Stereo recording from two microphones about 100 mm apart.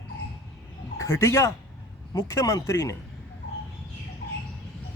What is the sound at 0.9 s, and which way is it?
Speech, 30° left (ahead or behind).